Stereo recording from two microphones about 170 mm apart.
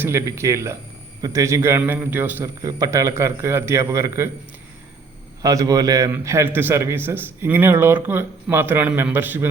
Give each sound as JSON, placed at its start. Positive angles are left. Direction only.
{"t": 0.0, "sound": "a man's voice", "side_deg": -15}
{"t": 5.4, "sound": "a man's voice", "side_deg": -20}